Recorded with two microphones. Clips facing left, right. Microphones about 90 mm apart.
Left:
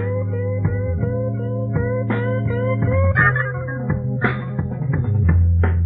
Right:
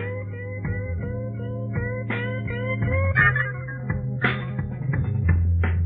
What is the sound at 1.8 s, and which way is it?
Music, 30° left (ahead or behind).